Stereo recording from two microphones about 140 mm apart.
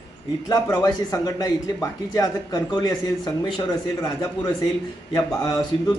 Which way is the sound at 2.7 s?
30° left (ahead or behind).